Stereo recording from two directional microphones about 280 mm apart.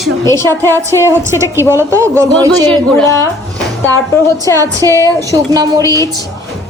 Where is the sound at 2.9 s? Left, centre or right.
Centre.